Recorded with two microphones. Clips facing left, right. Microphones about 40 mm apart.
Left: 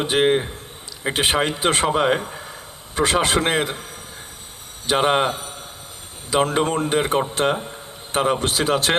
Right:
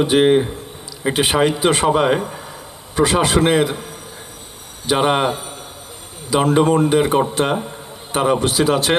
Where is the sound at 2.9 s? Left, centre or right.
Left.